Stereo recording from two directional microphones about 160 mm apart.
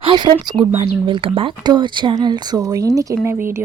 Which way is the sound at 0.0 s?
30° right (ahead or behind).